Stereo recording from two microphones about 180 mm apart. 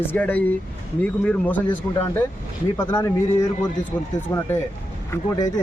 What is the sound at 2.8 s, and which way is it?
Speech, 15° left (ahead or behind).